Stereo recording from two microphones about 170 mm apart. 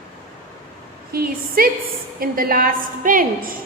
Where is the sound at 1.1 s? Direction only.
60° right (ahead or behind).